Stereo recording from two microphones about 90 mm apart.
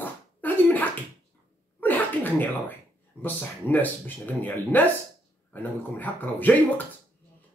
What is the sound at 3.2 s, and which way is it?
Speech, 20° left (ahead or behind).